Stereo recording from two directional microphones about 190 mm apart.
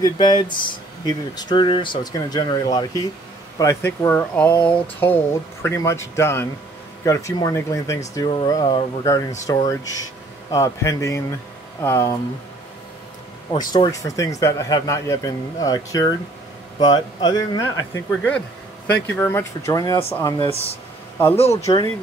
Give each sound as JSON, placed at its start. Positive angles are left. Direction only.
{"t": 0.0, "sound": "speech", "side_deg": 25}
{"t": 13.7, "sound": "speech", "side_deg": 20}
{"t": 18.9, "sound": "speech", "side_deg": 60}
{"t": 19.1, "sound": "speech", "side_deg": 15}
{"t": 21.4, "sound": "speech", "side_deg": 35}